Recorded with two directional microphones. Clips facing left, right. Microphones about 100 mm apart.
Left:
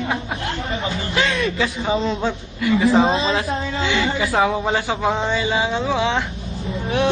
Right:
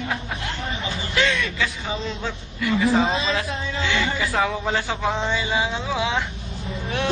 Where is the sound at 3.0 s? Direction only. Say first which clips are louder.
Left 4 dB; 35° left (ahead or behind).